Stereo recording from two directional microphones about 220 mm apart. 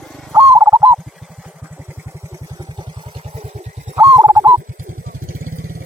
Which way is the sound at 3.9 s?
5° right (ahead or behind).